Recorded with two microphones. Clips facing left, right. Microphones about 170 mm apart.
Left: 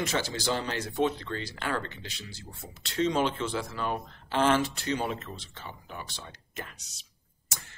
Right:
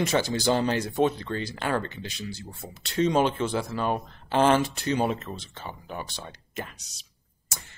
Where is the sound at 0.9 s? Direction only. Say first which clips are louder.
Right 1 dB; 45° right (ahead or behind).